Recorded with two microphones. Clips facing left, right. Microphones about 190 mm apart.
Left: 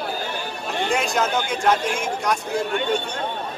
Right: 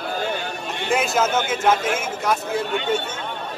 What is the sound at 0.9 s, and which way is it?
Speech, centre (ahead or behind).